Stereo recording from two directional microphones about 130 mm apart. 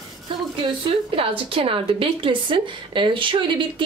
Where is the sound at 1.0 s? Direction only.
45° right (ahead or behind).